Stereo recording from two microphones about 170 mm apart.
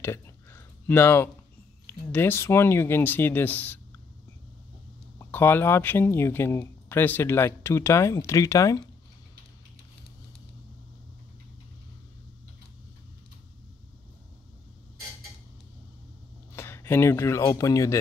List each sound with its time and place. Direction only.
0.0 s a sound: 15° left (ahead or behind)
1.9 s speech: 10° left (ahead or behind)
5.2 s speech: 10° left (ahead or behind)
16.5 s speech: 15° left (ahead or behind)